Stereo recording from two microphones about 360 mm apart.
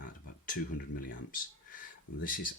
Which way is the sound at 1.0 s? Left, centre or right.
Left.